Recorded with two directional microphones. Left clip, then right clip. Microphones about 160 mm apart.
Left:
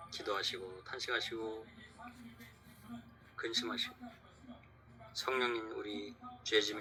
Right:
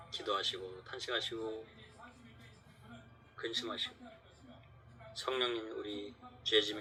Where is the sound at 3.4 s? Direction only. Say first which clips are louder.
Left 1 dB; 40° left (ahead or behind).